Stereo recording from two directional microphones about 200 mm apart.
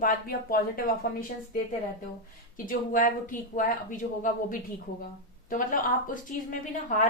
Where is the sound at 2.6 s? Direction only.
45° left (ahead or behind).